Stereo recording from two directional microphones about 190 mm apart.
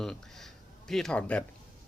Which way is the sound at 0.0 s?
Centre (ahead or behind).